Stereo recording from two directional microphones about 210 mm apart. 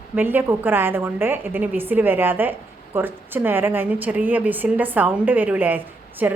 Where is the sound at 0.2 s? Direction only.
10° right (ahead or behind).